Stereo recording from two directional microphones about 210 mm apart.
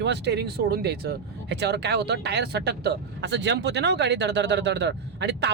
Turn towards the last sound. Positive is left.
turn(degrees=-55)  # may be behind; listen again after turning